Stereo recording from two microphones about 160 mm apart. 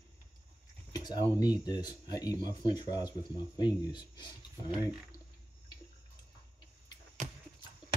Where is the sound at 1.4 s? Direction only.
25° left (ahead or behind).